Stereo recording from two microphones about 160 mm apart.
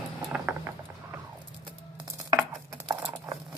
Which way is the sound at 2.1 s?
20° right (ahead or behind).